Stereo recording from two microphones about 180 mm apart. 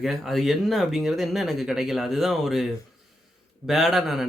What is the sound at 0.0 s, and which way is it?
Speech, centre (ahead or behind).